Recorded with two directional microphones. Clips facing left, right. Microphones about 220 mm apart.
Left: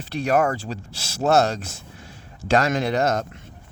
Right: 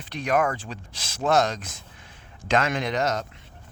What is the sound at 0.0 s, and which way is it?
Speech, 40° left (ahead or behind).